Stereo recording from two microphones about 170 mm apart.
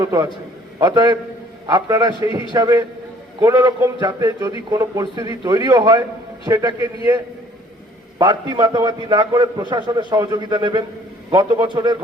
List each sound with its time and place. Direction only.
0.0 s a man's voice: 20° right (ahead or behind)
8.2 s a man's voice: 25° right (ahead or behind)